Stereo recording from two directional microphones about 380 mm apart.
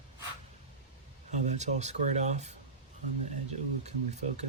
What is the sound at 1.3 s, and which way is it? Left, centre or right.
Speech, centre.